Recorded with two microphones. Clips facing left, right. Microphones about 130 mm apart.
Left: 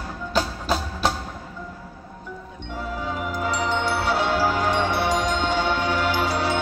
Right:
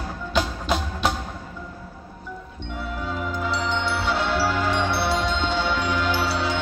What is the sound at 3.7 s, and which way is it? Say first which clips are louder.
Music: left 2 dB; 45° left (ahead or behind).